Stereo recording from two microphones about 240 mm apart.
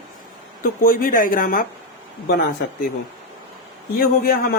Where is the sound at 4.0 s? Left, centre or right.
Left.